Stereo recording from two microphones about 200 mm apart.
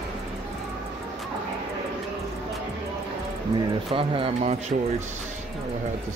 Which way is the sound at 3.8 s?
25° right (ahead or behind).